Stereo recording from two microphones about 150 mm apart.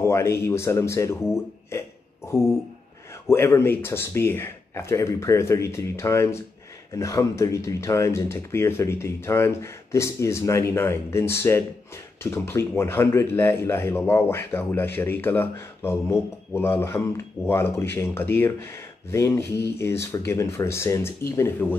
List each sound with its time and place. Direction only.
0.0 s speech: 20° left (ahead or behind)
3.3 s speech: 15° left (ahead or behind)